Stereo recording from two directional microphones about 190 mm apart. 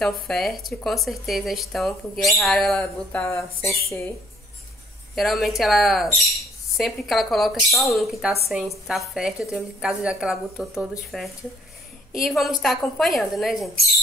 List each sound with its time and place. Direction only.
0.0 s speech: centre (ahead or behind)
5.1 s speech: centre (ahead or behind)